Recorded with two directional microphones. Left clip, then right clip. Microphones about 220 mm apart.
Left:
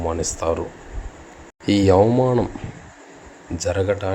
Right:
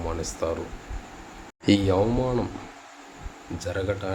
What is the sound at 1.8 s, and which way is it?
Speech, 30° left (ahead or behind).